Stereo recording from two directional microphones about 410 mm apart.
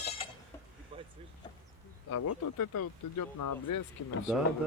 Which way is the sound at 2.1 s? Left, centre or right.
Left.